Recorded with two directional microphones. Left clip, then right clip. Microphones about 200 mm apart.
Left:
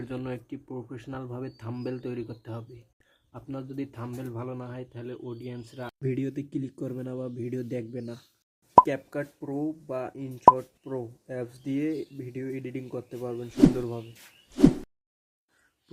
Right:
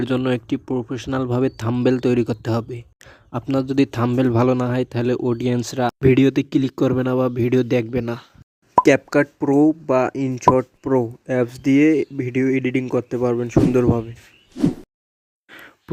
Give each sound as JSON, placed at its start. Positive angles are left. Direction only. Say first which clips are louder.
{"t": 0.0, "sound": "speech", "louder": "right 15 dB", "side_deg": -40}